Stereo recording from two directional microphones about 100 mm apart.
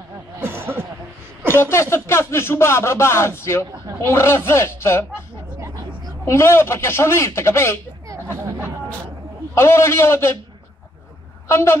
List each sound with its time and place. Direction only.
0.4 s a sound: 25° right (ahead or behind)
1.5 s a man's voice: 25° left (ahead or behind)
6.2 s a man's voice: 25° left (ahead or behind)
9.6 s a man's voice: 25° left (ahead or behind)
11.4 s a man's voice: 25° left (ahead or behind)